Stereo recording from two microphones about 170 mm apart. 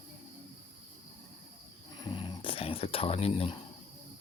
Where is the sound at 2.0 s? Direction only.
25° left (ahead or behind).